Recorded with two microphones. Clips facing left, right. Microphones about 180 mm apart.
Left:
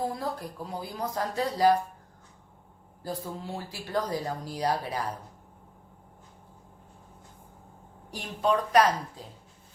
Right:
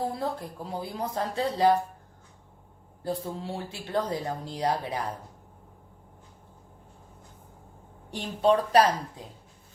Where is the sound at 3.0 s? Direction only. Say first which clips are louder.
Right 3 dB; 25° right (ahead or behind).